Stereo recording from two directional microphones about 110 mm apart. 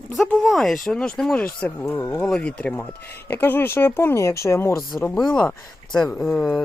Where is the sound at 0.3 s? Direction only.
Centre (ahead or behind).